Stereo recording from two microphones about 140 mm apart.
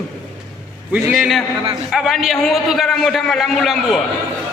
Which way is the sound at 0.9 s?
Centre (ahead or behind).